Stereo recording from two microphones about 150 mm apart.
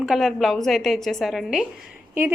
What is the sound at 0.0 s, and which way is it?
A woman's voice, centre (ahead or behind).